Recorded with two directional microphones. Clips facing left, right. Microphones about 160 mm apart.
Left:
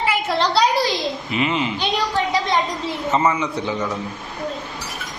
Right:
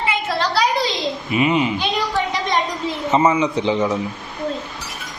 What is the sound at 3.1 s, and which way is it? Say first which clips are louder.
Speech: right 3 dB; 15° right (ahead or behind).